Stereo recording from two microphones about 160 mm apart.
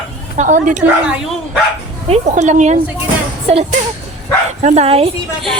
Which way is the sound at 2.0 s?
45° right (ahead or behind).